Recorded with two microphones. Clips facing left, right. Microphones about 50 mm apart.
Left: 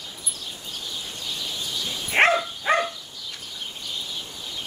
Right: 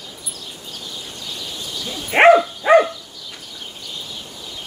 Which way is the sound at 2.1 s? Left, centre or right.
Right.